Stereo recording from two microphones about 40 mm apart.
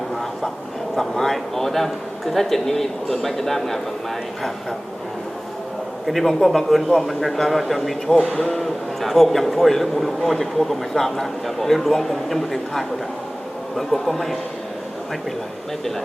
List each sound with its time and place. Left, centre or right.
1.1 s speech: centre
6.1 s a man's voice: centre
8.2 s speech: centre
8.4 s a man's voice: centre